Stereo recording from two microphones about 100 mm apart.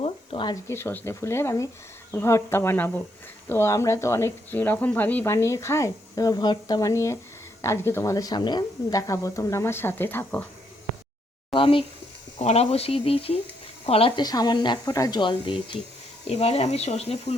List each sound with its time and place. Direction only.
0.0 s a sound: 70° left (ahead or behind)
0.7 s speech: 20° left (ahead or behind)
5.3 s speech: 30° left (ahead or behind)
8.1 s speech: 40° left (ahead or behind); by 10.5 s 20° left (ahead or behind)
11.5 s speech: 60° left (ahead or behind)
12.5 s speech: 90° left
14.2 s speech: 40° left (ahead or behind)
15.2 s speech: 50° left (ahead or behind)
16.2 s speech: 90° left